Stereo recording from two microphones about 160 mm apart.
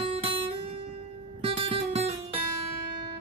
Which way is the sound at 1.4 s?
35° right (ahead or behind).